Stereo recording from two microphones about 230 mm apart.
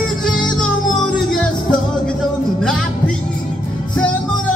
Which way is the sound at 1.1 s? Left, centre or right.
Centre.